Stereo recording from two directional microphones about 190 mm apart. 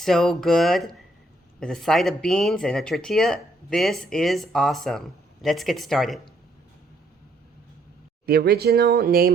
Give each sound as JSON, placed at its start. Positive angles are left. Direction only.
{"t": 0.0, "sound": "speech", "side_deg": 0}
{"t": 8.3, "sound": "speech", "side_deg": -55}